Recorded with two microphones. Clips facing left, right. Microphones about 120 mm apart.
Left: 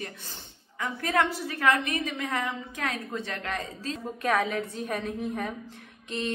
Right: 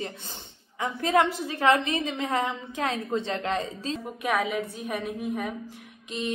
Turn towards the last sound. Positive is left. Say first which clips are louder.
# even
turn(degrees=-15)  # may be behind; listen again after turning